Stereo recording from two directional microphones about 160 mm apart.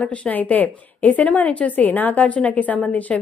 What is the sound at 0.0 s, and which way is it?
A woman's voice, 10° left (ahead or behind).